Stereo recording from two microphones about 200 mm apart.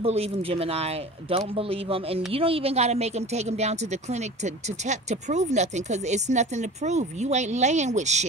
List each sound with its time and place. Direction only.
0.0 s speech: 30° right (ahead or behind)